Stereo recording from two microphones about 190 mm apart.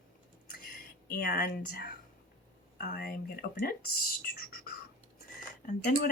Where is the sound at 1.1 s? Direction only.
55° left (ahead or behind).